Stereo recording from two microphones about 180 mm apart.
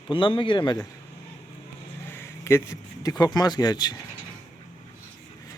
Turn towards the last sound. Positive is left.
turn(degrees=25)  # may be behind; listen again after turning